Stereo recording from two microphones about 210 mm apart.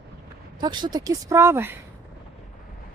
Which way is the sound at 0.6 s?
20° right (ahead or behind).